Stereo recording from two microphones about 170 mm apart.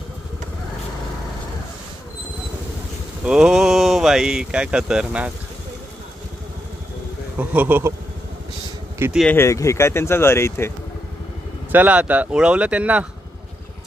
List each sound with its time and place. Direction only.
3.3 s speech: 5° right (ahead or behind)
7.3 s speech: 10° right (ahead or behind)
9.3 s speech: 15° left (ahead or behind)
11.7 s speech: 10° right (ahead or behind)